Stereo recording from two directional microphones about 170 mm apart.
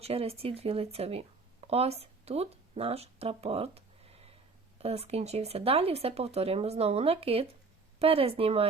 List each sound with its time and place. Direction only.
0.0 s speech: 35° right (ahead or behind)